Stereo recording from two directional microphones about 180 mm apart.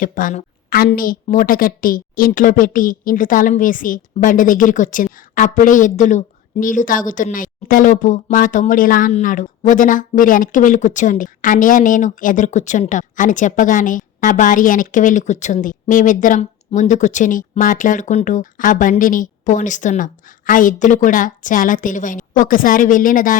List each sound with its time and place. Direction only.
0.0 s speech: 50° left (ahead or behind)